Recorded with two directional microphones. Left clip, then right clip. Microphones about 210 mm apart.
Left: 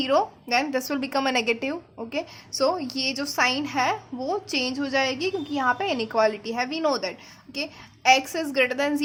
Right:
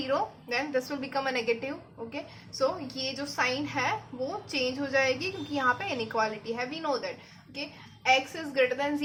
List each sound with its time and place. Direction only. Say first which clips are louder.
0.0 s a woman's voice: left 7 dB; 50° left (ahead or behind)